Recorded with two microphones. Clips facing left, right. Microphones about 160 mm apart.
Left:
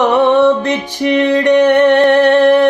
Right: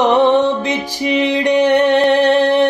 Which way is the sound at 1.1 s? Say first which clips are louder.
Left 4 dB; 10° right (ahead or behind).